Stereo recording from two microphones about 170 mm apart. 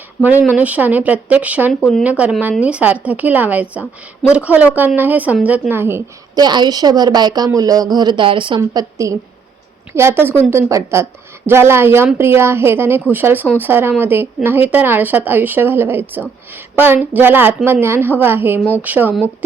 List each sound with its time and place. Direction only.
0.2 s speech: 10° right (ahead or behind)